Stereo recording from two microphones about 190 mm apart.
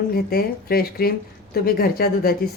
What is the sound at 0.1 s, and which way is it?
A woman's voice, 50° left (ahead or behind).